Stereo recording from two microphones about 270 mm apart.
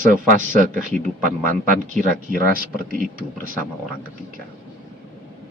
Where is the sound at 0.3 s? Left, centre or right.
Right.